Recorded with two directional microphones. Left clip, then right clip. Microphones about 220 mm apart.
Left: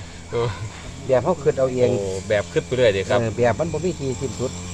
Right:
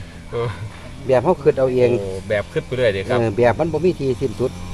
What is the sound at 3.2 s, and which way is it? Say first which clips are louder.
Speech: right 4 dB; 45° right (ahead or behind).